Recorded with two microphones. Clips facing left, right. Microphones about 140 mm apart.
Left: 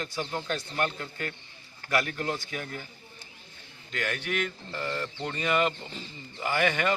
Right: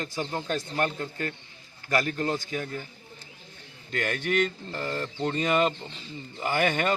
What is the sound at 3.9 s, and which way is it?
Speech, 45° right (ahead or behind).